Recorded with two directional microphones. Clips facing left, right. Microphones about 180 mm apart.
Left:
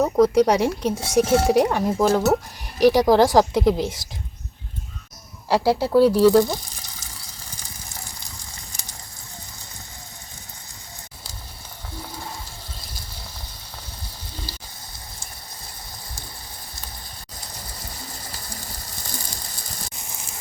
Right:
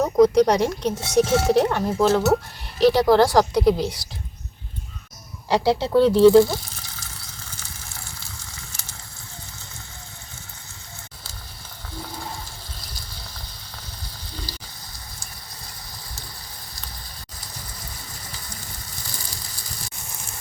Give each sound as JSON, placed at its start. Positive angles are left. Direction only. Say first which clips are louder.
{"t": 0.0, "sound": "speech", "louder": "right 1 dB", "side_deg": 5}
{"t": 5.5, "sound": "speech", "louder": "left 1 dB", "side_deg": 5}
{"t": 6.4, "sound": "a sound", "louder": "right 2 dB", "side_deg": 15}